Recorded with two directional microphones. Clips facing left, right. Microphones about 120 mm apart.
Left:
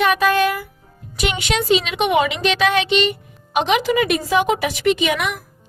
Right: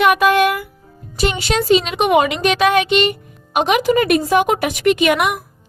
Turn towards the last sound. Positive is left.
turn(degrees=-60)  # may be behind; listen again after turning